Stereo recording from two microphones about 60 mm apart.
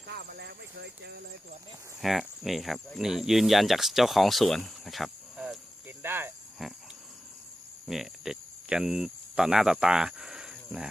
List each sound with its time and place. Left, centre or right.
2.0 s speech: centre
6.0 s speech: right
6.6 s a sound: centre
7.9 s speech: centre
9.7 s cricket: centre